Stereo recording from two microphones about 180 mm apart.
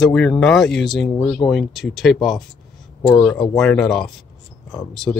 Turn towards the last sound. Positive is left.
turn(degrees=0)  # may be behind; listen again after turning